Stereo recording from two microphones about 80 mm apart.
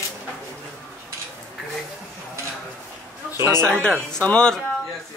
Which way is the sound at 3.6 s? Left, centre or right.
Centre.